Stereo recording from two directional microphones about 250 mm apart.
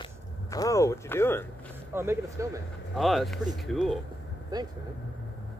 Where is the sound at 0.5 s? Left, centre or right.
Centre.